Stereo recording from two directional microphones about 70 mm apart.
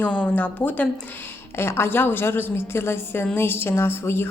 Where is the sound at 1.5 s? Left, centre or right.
Left.